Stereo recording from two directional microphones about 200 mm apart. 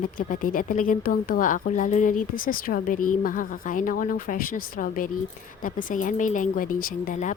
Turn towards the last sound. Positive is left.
turn(degrees=40)  # may be behind; listen again after turning